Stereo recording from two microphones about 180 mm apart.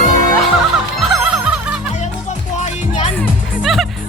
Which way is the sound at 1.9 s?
40° left (ahead or behind).